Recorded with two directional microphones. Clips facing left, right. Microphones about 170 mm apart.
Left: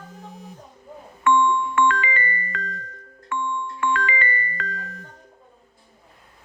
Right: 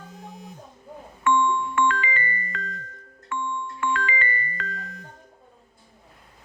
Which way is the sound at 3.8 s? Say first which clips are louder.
Left 2 dB; 65° left (ahead or behind).